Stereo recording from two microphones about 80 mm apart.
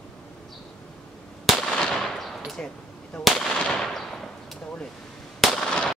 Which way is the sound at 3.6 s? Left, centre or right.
Centre.